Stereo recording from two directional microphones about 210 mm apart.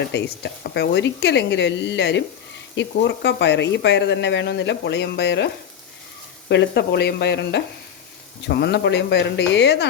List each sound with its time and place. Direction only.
0.1 s speech: 55° left (ahead or behind)
6.5 s speech: 55° left (ahead or behind)